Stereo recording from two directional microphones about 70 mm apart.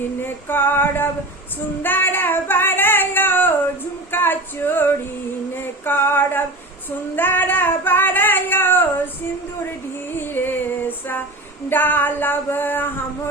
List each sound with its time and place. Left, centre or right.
0.2 s female singing: left
1.8 s singing: left
4.1 s female singing: left
5.8 s a sound: left
7.2 s female singing: left
10.2 s female singing: left
11.7 s a sound: left